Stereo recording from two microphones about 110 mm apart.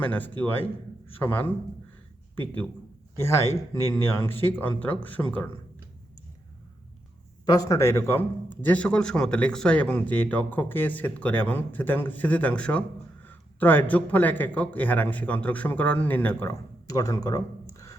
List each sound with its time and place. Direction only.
0.0 s a man's voice: 15° left (ahead or behind)
3.2 s speech: 25° left (ahead or behind)
7.4 s speech: 35° left (ahead or behind); by 16.5 s 15° left (ahead or behind)
16.5 s speech: 35° left (ahead or behind)